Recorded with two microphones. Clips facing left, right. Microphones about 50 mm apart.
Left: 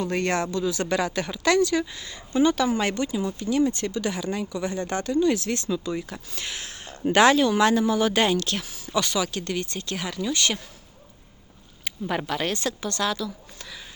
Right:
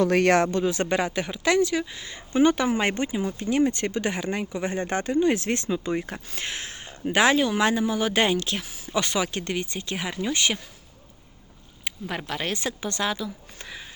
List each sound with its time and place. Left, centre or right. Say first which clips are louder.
0.0 s speech: right 6 dB; right
1.1 s speech: left 1 dB; centre
6.8 s speech: left 3 dB; centre
10.2 s speech: even; right
11.9 s speech: left 4 dB; centre
12.6 s speech: left 1 dB; centre